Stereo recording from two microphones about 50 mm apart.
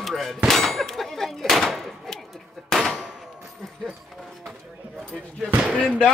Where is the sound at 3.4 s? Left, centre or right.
Centre.